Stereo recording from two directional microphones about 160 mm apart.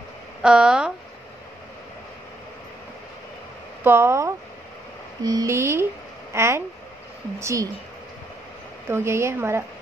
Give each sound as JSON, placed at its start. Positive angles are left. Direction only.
{"t": 0.4, "sound": "speech", "side_deg": -5}
{"t": 3.8, "sound": "a woman's voice", "side_deg": -15}
{"t": 8.8, "sound": "speech", "side_deg": -15}